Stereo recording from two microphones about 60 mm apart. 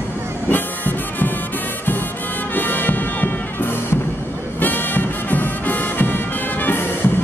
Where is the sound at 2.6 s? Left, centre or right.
Left.